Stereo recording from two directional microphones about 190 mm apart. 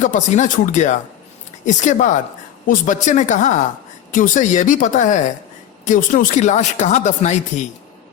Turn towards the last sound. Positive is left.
turn(degrees=40)  # may be behind; listen again after turning